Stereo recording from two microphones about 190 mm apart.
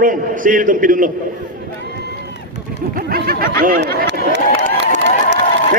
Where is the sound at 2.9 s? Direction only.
50° right (ahead or behind).